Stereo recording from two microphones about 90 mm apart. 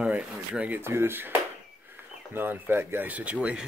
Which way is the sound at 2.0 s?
25° right (ahead or behind).